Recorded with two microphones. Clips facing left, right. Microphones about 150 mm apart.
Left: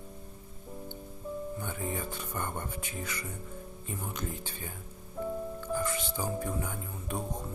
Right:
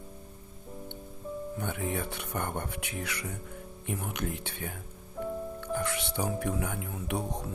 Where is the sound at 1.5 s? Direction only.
70° right (ahead or behind).